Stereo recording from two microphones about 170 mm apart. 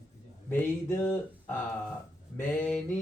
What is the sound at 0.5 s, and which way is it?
Speech, 10° left (ahead or behind).